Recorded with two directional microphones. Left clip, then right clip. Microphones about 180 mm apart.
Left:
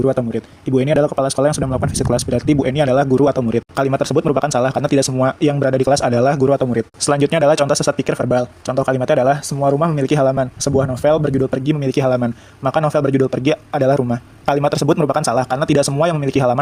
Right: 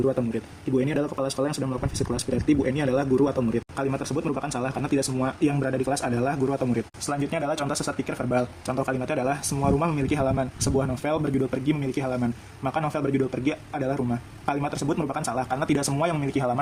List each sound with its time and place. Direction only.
0.0 s speech: 35° left (ahead or behind)